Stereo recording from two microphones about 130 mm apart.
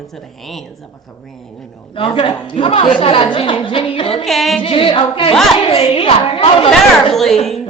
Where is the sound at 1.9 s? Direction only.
45° left (ahead or behind).